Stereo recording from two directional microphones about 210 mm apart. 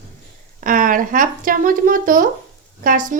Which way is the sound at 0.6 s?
40° right (ahead or behind).